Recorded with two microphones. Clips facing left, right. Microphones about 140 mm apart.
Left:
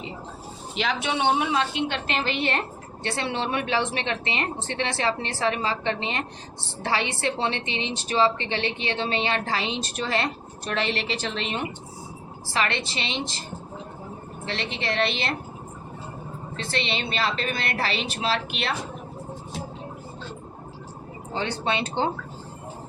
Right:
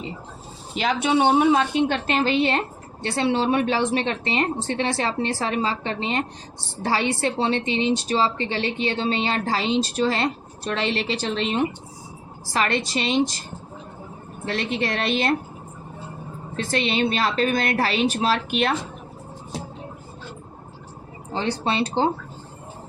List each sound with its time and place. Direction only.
0.8 s a woman's voice: 40° right (ahead or behind)
14.4 s a woman's voice: 45° right (ahead or behind)
16.6 s a woman's voice: 45° right (ahead or behind)
21.3 s a woman's voice: 35° right (ahead or behind)